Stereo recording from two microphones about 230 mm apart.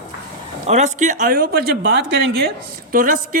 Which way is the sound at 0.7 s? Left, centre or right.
Right.